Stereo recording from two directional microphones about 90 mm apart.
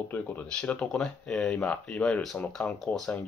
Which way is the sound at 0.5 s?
10° left (ahead or behind).